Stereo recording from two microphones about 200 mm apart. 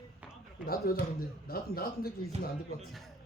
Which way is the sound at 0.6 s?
50° left (ahead or behind).